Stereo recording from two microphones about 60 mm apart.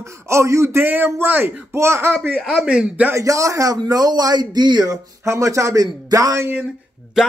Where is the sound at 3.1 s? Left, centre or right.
Right.